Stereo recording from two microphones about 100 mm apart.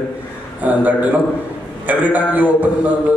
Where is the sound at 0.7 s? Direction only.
15° right (ahead or behind).